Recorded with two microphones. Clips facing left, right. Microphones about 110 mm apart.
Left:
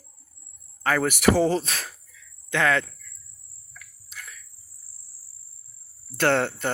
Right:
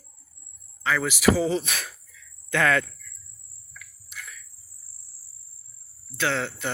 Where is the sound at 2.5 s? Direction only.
20° left (ahead or behind).